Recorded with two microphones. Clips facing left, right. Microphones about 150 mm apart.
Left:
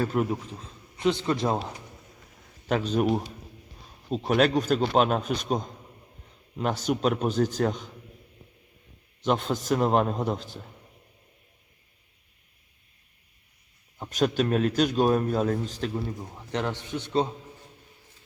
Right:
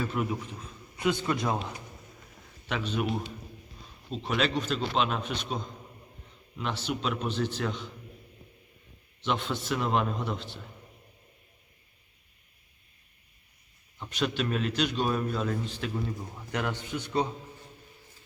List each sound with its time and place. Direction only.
0.0 s speech: 40° left (ahead or behind)
0.9 s a man's voice: 25° left (ahead or behind); by 7.9 s 45° left (ahead or behind)
9.2 s a man's voice: 40° left (ahead or behind)
14.0 s a man's voice: 45° left (ahead or behind)
16.3 s a man's voice: 25° left (ahead or behind)